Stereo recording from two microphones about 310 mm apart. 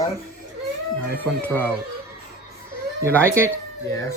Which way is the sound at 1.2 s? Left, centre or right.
Centre.